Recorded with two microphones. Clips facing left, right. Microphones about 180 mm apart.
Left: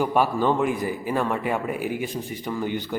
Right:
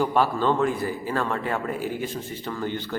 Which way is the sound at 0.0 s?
15° left (ahead or behind).